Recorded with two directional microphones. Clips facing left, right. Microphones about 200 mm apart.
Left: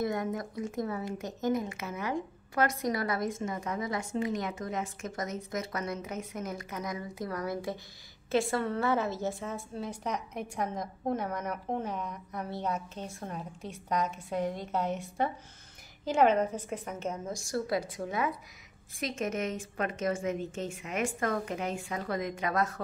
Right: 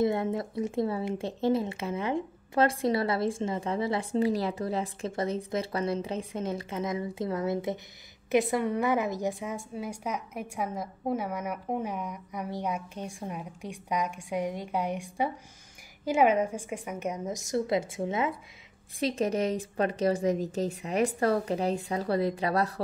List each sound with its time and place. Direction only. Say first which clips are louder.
0.0 s a woman's voice: right 5 dB; 25° right (ahead or behind)